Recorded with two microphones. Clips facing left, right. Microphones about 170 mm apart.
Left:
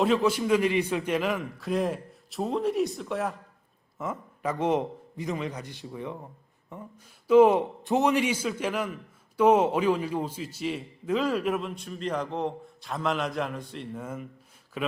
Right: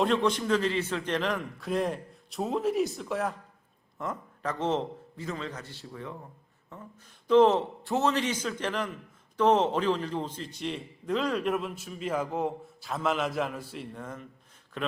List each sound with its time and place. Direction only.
0.0 s a man's voice: 5° left (ahead or behind)